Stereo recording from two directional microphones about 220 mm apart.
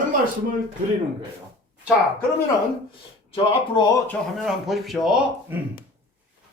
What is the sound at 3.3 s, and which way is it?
Speech, 25° left (ahead or behind).